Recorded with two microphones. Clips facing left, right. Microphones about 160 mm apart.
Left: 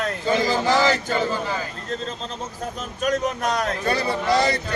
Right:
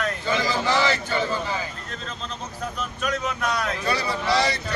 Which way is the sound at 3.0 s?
45° left (ahead or behind).